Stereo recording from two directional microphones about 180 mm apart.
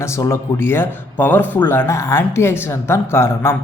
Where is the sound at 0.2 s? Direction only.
15° left (ahead or behind).